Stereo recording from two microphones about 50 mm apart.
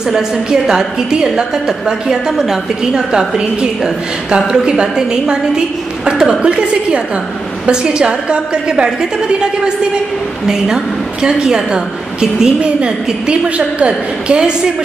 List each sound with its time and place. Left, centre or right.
0.1 s a woman's voice: centre
10.4 s a woman's voice: centre